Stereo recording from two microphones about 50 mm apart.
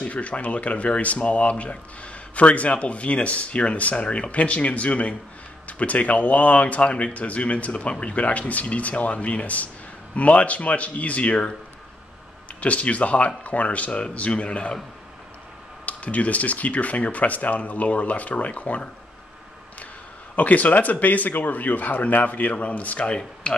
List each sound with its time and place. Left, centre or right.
0.0 s speech: left
12.5 s speech: left
15.8 s speech: left
20.3 s speech: left